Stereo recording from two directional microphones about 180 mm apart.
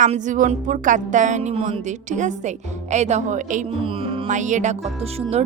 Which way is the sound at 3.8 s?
30° right (ahead or behind).